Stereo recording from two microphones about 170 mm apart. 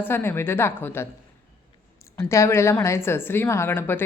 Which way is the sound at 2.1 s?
15° left (ahead or behind).